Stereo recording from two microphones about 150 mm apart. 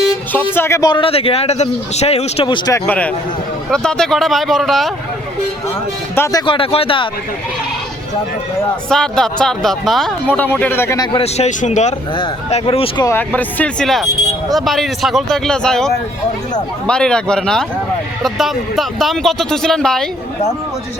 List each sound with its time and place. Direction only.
0.5 s speech: 15° left (ahead or behind)
2.7 s speech: 10° left (ahead or behind)
6.1 s speech: 20° left (ahead or behind)
6.4 s speech: 35° left (ahead or behind)
8.9 s speech: 5° left (ahead or behind); by 11.2 s 25° left (ahead or behind)
11.2 s speech: 50° left (ahead or behind)
12.1 s speech: 40° left (ahead or behind)
13.1 s speech: 10° left (ahead or behind)